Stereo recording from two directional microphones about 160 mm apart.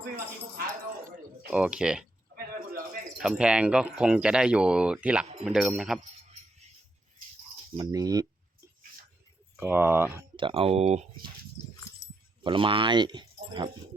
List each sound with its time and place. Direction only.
1.5 s speech: 5° right (ahead or behind)
2.3 s a sound: 65° right (ahead or behind)
3.2 s speech: 5° right (ahead or behind)
7.8 s speech: 25° right (ahead or behind)
9.6 s speech: 10° right (ahead or behind)
10.3 s speech: 35° right (ahead or behind)
12.4 s speech: 30° right (ahead or behind)